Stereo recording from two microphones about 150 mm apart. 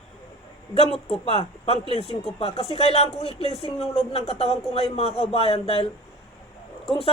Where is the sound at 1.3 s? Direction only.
40° left (ahead or behind).